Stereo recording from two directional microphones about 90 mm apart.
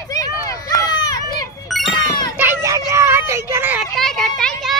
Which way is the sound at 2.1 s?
45° left (ahead or behind).